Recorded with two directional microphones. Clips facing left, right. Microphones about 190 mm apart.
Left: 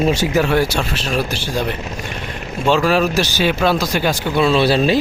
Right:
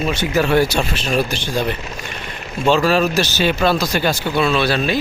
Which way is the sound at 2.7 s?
10° left (ahead or behind).